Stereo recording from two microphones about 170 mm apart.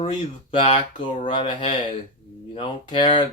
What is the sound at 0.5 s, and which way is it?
Speech, 30° left (ahead or behind).